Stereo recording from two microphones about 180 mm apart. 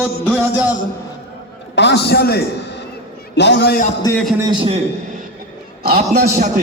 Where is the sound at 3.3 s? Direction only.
70° left (ahead or behind).